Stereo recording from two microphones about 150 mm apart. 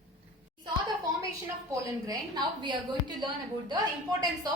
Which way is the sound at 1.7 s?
25° right (ahead or behind).